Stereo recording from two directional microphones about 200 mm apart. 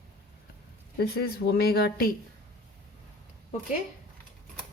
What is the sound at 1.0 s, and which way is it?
Speech, 55° left (ahead or behind).